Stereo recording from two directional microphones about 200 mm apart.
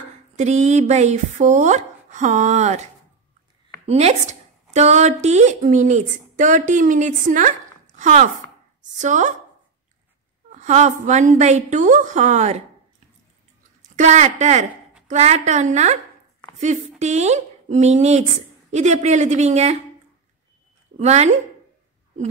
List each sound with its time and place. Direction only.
0.4 s a woman's voice: 35° right (ahead or behind)
3.8 s a woman's voice: 30° right (ahead or behind)
10.5 s a woman's voice: 35° right (ahead or behind)
13.9 s a woman's voice: 35° right (ahead or behind)
17.0 s a woman's voice: 35° right (ahead or behind)
21.0 s a woman's voice: 35° right (ahead or behind)